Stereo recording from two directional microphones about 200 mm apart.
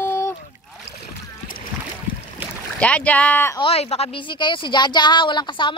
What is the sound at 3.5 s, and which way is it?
Speech, 30° left (ahead or behind).